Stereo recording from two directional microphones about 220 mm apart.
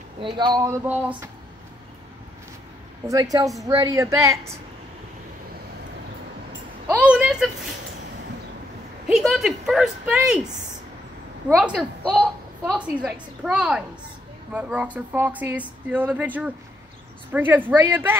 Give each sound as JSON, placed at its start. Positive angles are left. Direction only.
{"t": 0.2, "sound": "speech", "side_deg": -20}
{"t": 3.1, "sound": "speech", "side_deg": -15}
{"t": 6.9, "sound": "a sound", "side_deg": -5}
{"t": 9.0, "sound": "speech", "side_deg": 0}
{"t": 11.5, "sound": "speech", "side_deg": -5}